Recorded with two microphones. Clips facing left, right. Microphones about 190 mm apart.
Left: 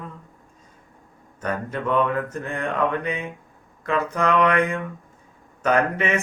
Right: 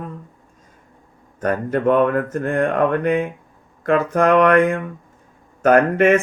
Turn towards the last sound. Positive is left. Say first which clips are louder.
# right 8 dB
turn(degrees=-50)  # may be behind; listen again after turning